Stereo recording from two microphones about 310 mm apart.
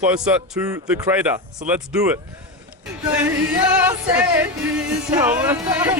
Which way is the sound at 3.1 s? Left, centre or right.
Centre.